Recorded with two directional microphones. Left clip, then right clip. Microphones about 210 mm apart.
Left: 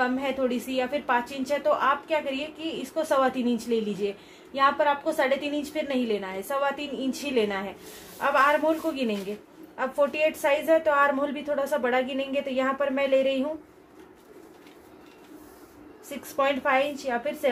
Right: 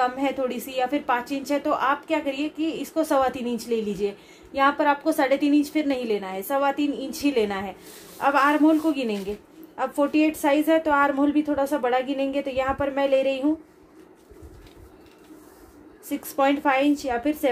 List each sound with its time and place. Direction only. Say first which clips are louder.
0.0 s a woman's voice: right 2 dB; 40° right (ahead or behind)
16.3 s a woman's voice: right 3 dB; 45° right (ahead or behind)